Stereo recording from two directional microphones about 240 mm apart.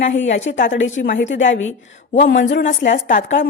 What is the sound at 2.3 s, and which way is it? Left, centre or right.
A woman's voice, left.